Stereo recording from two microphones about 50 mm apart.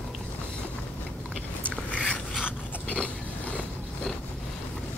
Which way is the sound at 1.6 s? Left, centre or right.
Left.